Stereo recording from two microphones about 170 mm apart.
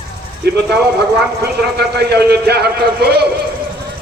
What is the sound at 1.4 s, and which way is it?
A man's voice, 70° right (ahead or behind).